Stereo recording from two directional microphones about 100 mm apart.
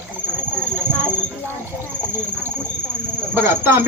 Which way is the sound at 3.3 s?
20° right (ahead or behind).